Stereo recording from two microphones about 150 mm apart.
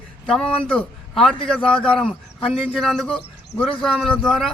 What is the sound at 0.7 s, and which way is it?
A man's voice, 5° left (ahead or behind).